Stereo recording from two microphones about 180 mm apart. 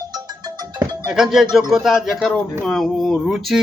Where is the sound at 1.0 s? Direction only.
5° right (ahead or behind).